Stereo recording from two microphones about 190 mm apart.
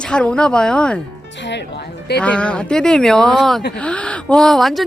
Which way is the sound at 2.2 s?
5° left (ahead or behind).